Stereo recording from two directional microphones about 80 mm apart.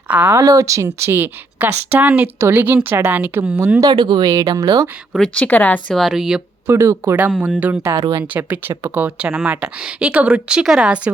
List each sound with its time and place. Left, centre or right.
0.1 s speech: right
0.3 s speech: right
0.9 s speech: right
3.8 s speech: right
4.3 s speech: right
5.2 s a woman's voice: centre
5.9 s speech: centre
6.7 s speech: right
7.2 s speech: centre